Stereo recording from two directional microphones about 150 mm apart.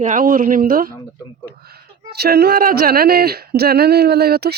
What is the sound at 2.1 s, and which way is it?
Speech, 90° right.